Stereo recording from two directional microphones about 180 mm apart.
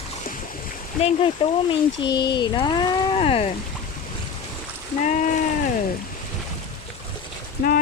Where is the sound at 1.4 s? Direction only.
30° left (ahead or behind).